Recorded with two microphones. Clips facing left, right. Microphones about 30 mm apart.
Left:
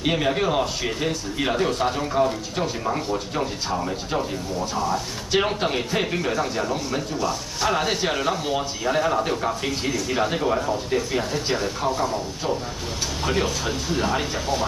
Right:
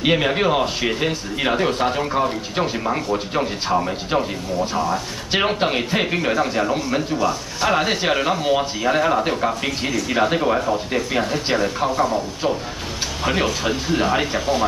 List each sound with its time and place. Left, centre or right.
0.0 s speech: right